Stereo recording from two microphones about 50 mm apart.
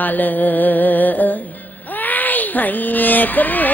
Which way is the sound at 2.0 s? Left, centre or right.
Left.